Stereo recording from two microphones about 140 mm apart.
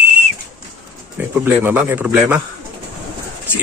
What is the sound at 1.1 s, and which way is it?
Speech, 10° right (ahead or behind).